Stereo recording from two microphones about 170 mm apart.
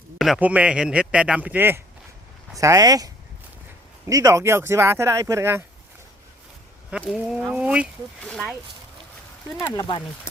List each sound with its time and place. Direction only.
0.2 s a man's voice: 5° right (ahead or behind)
6.9 s speech: 5° right (ahead or behind)
9.6 s speech: 20° left (ahead or behind)